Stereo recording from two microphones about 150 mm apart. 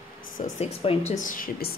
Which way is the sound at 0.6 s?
40° left (ahead or behind).